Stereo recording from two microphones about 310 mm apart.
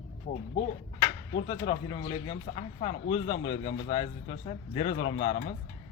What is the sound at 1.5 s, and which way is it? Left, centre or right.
Speech, centre.